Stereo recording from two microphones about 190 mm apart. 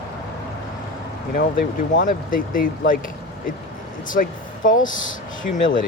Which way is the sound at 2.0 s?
45° left (ahead or behind).